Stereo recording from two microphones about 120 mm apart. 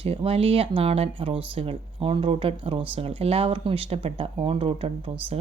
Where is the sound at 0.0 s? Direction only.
50° right (ahead or behind).